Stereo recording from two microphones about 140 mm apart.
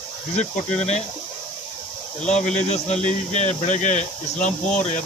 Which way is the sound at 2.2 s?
55° left (ahead or behind).